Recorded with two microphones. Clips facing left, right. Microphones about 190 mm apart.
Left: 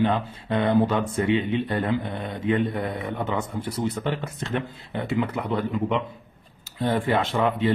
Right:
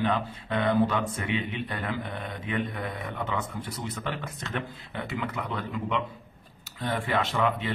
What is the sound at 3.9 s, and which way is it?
Speech, 30° left (ahead or behind).